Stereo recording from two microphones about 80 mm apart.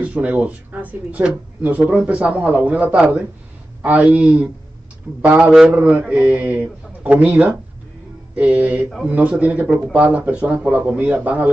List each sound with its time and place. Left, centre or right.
0.0 s speech: centre